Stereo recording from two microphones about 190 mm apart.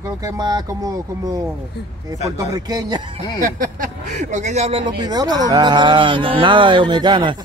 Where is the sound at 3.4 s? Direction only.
45° right (ahead or behind).